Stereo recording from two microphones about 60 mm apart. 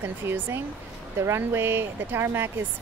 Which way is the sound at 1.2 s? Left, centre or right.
Right.